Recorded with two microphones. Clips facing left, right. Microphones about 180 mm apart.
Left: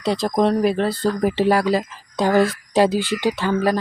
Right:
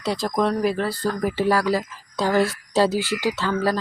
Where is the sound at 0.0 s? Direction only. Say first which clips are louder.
Left 4 dB; 20° left (ahead or behind).